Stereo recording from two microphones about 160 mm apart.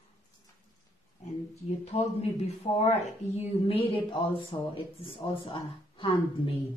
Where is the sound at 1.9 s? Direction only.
35° left (ahead or behind).